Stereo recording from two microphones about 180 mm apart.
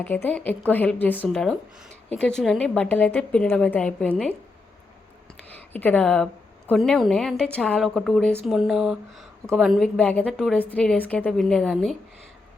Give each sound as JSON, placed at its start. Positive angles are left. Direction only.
{"t": 0.0, "sound": "speech", "side_deg": 10}
{"t": 5.4, "sound": "a sound", "side_deg": 10}
{"t": 6.7, "sound": "speech", "side_deg": 0}